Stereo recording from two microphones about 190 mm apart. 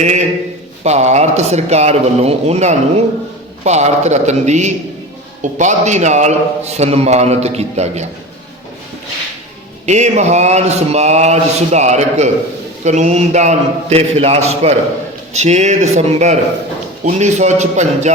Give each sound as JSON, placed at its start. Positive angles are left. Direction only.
{"t": 0.9, "sound": "a man's voice", "side_deg": -35}
{"t": 9.8, "sound": "a man's voice", "side_deg": -35}